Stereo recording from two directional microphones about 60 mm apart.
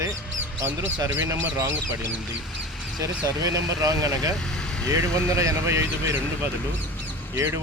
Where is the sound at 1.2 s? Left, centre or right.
Right.